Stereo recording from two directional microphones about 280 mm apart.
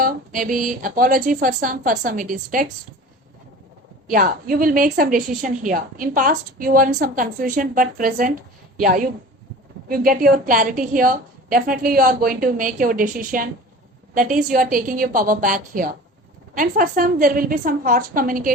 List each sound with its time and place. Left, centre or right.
0.0 s a woman's voice: right
4.0 s a woman's voice: right